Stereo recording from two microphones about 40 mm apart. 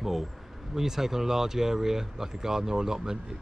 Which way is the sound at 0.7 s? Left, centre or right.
Centre.